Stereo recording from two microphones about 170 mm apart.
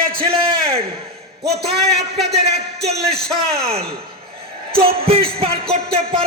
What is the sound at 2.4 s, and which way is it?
Speech, 40° right (ahead or behind).